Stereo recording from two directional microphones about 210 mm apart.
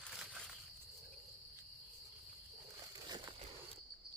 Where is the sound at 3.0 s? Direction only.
20° right (ahead or behind).